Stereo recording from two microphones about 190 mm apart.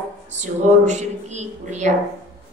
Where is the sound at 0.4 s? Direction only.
40° right (ahead or behind).